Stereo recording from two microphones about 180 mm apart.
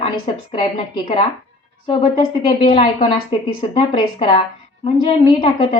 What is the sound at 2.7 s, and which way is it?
A woman's voice, 30° left (ahead or behind).